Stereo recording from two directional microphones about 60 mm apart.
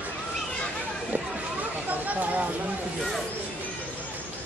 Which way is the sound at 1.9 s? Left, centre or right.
Right.